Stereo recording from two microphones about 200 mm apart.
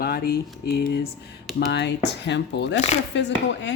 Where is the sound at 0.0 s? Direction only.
50° left (ahead or behind).